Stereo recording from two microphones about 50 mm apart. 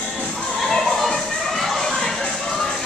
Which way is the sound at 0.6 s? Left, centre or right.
Centre.